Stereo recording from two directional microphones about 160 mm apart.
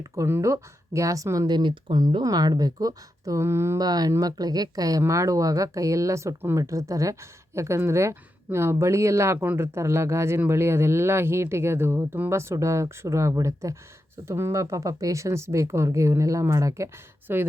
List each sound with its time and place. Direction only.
0.0 s speech: 15° right (ahead or behind)